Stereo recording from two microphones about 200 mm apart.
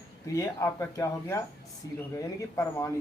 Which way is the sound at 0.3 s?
15° left (ahead or behind).